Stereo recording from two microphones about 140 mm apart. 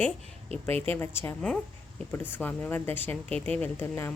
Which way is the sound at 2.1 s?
15° left (ahead or behind).